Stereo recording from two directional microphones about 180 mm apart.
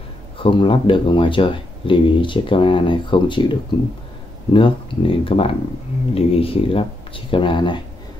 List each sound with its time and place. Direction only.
0.4 s speech: 30° left (ahead or behind)